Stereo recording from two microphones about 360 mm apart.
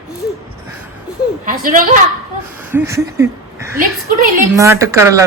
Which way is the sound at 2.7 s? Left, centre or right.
Centre.